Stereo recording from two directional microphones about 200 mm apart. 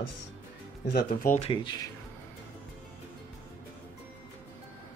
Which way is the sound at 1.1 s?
40° left (ahead or behind).